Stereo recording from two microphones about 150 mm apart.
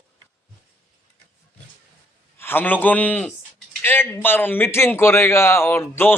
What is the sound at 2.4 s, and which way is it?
A man's voice, 15° left (ahead or behind).